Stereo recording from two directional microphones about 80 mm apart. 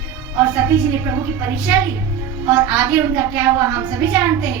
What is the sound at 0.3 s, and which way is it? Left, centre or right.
A woman's voice, right.